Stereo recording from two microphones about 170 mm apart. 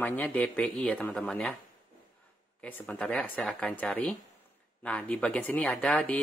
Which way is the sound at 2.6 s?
5° left (ahead or behind).